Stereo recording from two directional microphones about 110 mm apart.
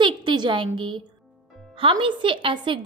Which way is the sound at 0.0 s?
45° right (ahead or behind).